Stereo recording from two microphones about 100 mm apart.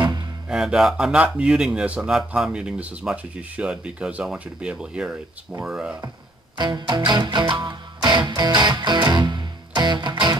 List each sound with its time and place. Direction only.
0.5 s speech: 5° right (ahead or behind)
6.5 s music: 45° right (ahead or behind)